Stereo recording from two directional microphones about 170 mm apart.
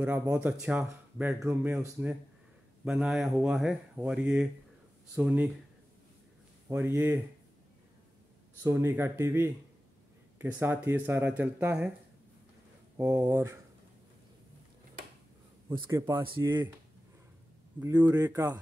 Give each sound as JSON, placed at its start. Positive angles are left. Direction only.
{"t": 0.0, "sound": "speech", "side_deg": -15}
{"t": 6.7, "sound": "speech", "side_deg": -15}
{"t": 8.6, "sound": "speech", "side_deg": -15}
{"t": 12.9, "sound": "speech", "side_deg": -10}
{"t": 16.3, "sound": "speech", "side_deg": -25}
{"t": 17.7, "sound": "speech", "side_deg": -10}